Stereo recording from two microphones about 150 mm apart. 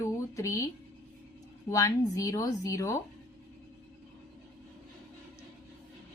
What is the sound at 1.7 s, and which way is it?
A woman's voice, 20° left (ahead or behind).